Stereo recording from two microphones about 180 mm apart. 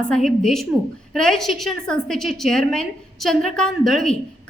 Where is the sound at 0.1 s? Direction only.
Centre (ahead or behind).